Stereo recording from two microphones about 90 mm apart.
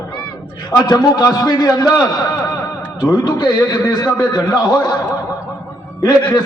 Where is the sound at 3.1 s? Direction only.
50° left (ahead or behind).